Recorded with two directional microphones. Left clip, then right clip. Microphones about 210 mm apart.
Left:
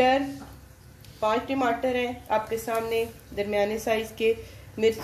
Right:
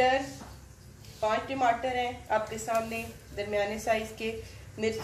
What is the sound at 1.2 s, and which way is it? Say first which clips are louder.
A woman's voice: left 2 dB; 50° left (ahead or behind).